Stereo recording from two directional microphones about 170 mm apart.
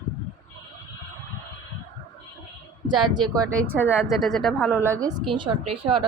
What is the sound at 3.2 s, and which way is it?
Speech, 20° right (ahead or behind).